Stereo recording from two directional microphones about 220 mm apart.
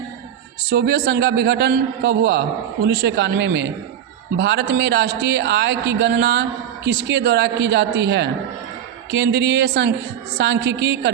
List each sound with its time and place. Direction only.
0.7 s a man's voice: 50° right (ahead or behind)